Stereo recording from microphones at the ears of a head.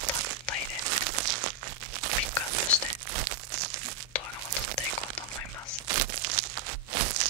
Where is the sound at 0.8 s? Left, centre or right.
Right.